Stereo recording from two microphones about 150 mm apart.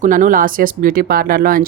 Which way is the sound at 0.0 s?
60° right (ahead or behind).